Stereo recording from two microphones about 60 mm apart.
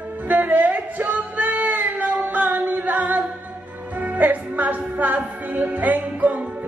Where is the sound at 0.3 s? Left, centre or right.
Right.